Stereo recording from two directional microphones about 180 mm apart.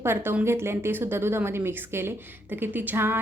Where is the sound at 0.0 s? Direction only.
15° right (ahead or behind).